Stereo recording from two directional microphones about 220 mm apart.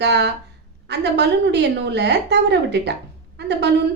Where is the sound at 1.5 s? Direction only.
50° right (ahead or behind).